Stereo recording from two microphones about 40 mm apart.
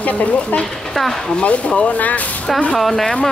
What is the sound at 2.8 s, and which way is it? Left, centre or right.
Speech, centre.